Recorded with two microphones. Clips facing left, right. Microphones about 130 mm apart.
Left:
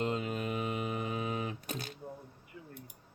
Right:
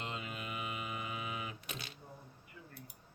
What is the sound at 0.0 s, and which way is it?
Mantra, 40° left (ahead or behind).